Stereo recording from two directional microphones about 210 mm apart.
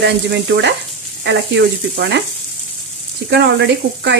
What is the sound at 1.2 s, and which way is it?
Sizzle, 55° right (ahead or behind).